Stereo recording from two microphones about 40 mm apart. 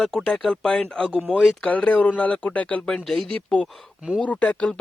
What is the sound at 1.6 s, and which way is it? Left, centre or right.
Speech, left.